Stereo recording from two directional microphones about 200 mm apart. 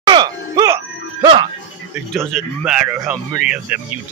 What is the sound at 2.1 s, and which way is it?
Speech, centre (ahead or behind).